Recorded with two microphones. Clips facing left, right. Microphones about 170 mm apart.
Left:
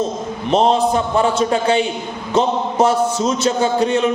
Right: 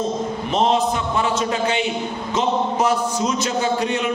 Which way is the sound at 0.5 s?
35° left (ahead or behind).